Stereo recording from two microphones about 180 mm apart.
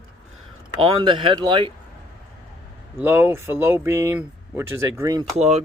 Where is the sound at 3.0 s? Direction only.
15° right (ahead or behind).